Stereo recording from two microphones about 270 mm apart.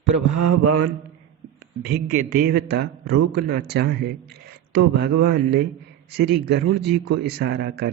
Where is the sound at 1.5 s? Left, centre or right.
Right.